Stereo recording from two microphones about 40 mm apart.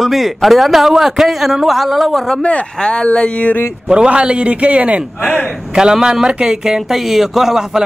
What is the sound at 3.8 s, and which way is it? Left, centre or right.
A man's voice, right.